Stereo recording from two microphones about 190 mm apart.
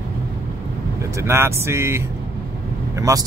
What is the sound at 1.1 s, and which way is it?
Speech, 15° right (ahead or behind).